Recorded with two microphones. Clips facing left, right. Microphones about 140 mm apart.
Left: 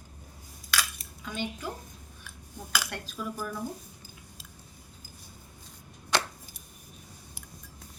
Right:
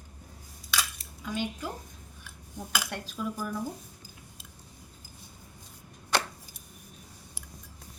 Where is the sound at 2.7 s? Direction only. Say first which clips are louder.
Even; 15° right (ahead or behind).